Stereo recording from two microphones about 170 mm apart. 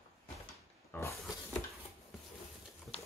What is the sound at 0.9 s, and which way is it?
Speech, 15° left (ahead or behind).